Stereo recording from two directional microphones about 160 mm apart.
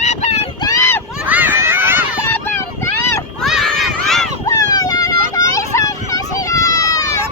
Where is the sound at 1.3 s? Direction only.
10° right (ahead or behind).